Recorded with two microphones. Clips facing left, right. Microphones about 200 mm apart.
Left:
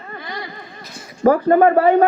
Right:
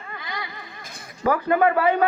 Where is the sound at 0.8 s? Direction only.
50° right (ahead or behind).